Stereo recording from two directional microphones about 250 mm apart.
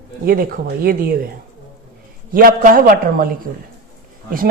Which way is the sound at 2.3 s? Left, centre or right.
Right.